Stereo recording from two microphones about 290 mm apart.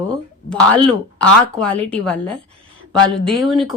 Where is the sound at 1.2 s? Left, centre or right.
Centre.